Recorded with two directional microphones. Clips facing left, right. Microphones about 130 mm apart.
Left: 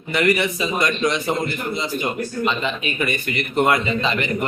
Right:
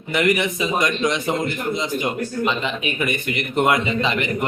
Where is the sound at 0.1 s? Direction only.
15° right (ahead or behind).